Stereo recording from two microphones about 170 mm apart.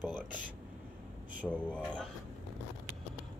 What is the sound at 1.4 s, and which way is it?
Speech, centre (ahead or behind).